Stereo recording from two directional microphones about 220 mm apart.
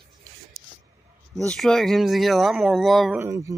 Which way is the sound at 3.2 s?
15° right (ahead or behind).